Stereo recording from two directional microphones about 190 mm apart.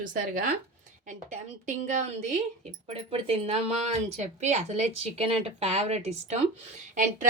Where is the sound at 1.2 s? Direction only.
40° right (ahead or behind).